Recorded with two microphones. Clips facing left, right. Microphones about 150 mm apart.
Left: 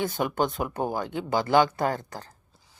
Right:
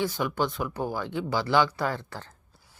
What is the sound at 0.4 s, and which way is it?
Speech, 20° left (ahead or behind).